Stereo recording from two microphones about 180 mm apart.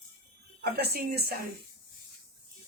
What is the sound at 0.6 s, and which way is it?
Speech, 60° right (ahead or behind).